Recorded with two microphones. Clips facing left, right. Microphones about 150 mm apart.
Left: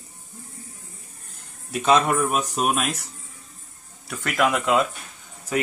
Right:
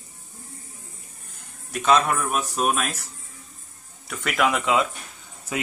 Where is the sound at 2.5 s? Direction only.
15° left (ahead or behind).